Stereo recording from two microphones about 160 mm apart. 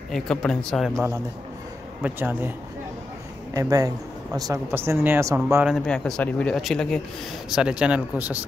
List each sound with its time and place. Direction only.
0.1 s speech: 5° left (ahead or behind)
2.0 s speech: 10° right (ahead or behind)
3.5 s a man's voice: 20° right (ahead or behind)
5.9 s speech: 5° left (ahead or behind)